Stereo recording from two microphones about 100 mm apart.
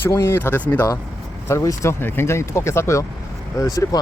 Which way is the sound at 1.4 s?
30° left (ahead or behind).